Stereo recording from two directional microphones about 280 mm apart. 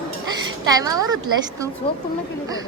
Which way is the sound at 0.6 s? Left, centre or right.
Centre.